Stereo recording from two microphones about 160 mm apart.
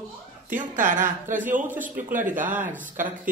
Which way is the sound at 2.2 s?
55° right (ahead or behind).